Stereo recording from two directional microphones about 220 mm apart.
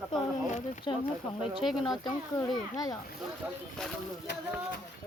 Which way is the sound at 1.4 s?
Centre (ahead or behind).